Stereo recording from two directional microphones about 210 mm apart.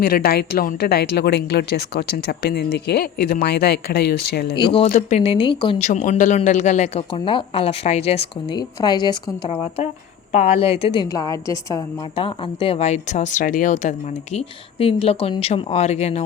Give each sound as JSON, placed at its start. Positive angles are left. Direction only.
{"t": 0.0, "sound": "a woman's voice", "side_deg": 45}
{"t": 4.9, "sound": "speech", "side_deg": 35}
{"t": 5.9, "sound": "speech", "side_deg": 35}